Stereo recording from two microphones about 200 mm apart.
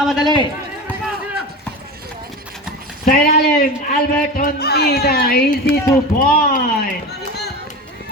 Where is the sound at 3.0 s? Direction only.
50° left (ahead or behind).